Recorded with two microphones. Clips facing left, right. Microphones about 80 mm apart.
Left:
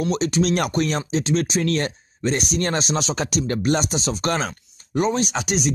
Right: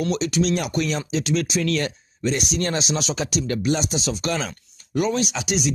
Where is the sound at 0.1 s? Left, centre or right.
Left.